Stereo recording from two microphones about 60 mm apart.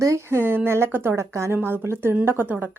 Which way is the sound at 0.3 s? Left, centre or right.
Right.